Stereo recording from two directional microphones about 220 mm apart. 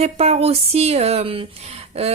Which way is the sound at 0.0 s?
30° right (ahead or behind).